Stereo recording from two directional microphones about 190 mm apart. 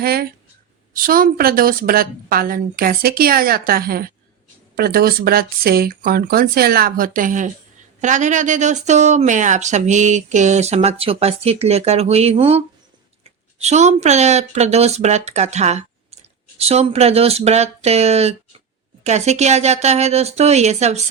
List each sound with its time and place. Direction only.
0.0 s a woman's voice: 50° right (ahead or behind); by 21.0 s 35° right (ahead or behind)